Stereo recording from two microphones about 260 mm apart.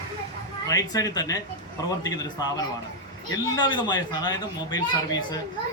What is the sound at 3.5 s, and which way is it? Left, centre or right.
A man's voice, centre.